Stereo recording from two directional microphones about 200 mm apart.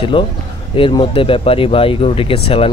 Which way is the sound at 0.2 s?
25° left (ahead or behind).